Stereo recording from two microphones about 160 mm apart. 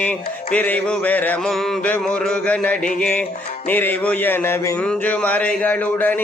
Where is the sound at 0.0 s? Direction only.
10° left (ahead or behind).